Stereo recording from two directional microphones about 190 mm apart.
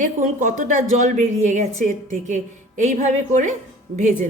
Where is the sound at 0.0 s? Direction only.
40° right (ahead or behind).